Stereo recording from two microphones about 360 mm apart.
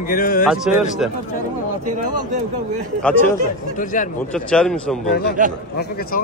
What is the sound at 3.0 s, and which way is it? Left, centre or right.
Speech, centre.